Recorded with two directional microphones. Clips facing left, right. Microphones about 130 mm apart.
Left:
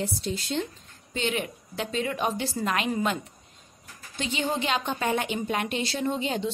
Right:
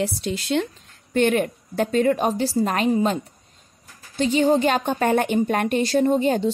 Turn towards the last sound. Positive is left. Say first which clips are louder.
# right 9 dB
turn(degrees=-45)  # may be behind; listen again after turning